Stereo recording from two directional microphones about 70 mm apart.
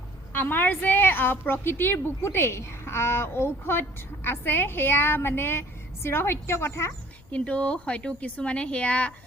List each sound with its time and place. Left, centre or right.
0.3 s a woman's voice: left
7.3 s a woman's voice: left